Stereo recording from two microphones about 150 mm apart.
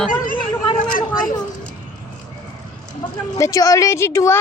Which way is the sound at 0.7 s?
65° left (ahead or behind).